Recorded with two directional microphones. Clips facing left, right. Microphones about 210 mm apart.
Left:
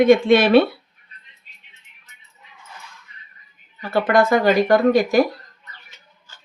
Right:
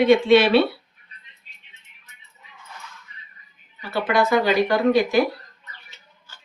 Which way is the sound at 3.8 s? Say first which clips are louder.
Left 4 dB; 50° left (ahead or behind).